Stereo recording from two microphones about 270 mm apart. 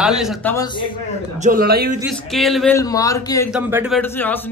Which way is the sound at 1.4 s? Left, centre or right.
Right.